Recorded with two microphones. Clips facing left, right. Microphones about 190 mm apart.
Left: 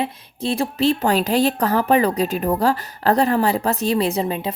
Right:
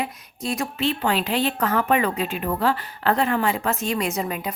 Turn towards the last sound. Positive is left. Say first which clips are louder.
# left 5 dB
turn(degrees=30)  # may be behind; listen again after turning